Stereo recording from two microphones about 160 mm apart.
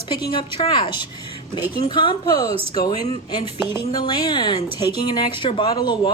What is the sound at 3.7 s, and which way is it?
Speech, 25° left (ahead or behind).